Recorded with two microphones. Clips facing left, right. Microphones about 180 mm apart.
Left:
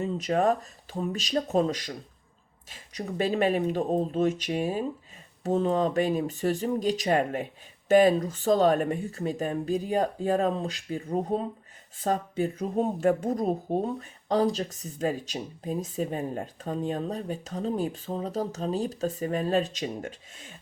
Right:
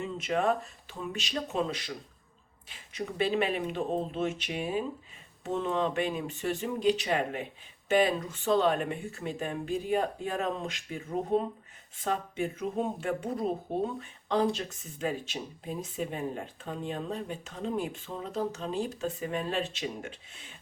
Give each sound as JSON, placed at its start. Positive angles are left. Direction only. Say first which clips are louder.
{"t": 0.0, "sound": "speech", "louder": "left 4 dB", "side_deg": 40}